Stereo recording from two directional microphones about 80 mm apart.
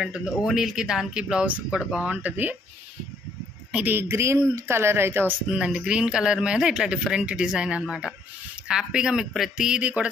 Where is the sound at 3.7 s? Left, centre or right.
Right.